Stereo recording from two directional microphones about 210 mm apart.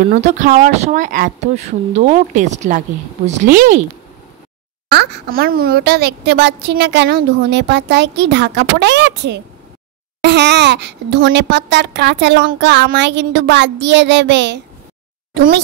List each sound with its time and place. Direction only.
0.1 s speech: 35° right (ahead or behind)
4.9 s a child's voice: 55° right (ahead or behind)